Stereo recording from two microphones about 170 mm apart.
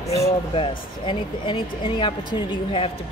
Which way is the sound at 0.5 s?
30° left (ahead or behind).